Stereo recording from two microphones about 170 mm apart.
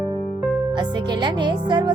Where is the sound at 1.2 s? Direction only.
25° right (ahead or behind).